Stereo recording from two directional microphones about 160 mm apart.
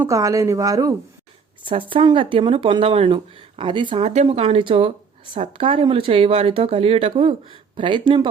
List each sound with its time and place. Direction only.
0.0 s a woman's voice: 20° right (ahead or behind)
1.6 s speech: 35° right (ahead or behind)